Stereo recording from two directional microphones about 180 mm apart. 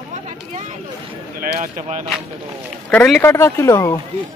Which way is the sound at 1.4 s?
50° right (ahead or behind).